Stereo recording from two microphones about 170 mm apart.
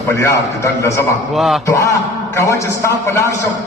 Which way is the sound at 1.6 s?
20° left (ahead or behind).